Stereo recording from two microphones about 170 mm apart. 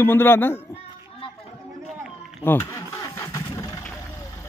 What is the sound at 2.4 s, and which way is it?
Engine starting, 15° left (ahead or behind).